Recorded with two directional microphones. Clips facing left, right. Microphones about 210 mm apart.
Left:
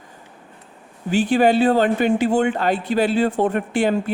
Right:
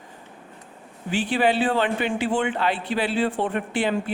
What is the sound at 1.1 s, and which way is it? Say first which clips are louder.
A woman's voice: left 6 dB; 45° left (ahead or behind).